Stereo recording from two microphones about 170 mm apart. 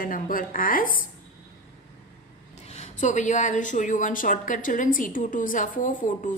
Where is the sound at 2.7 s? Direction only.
45° left (ahead or behind).